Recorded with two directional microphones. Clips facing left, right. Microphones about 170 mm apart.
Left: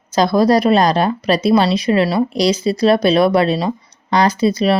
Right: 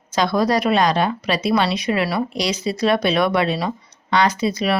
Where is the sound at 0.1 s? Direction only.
35° left (ahead or behind).